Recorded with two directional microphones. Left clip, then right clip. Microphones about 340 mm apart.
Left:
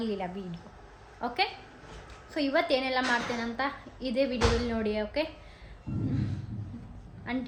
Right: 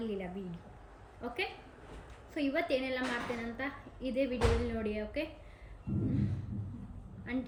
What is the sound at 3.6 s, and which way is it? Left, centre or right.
A woman's voice, centre.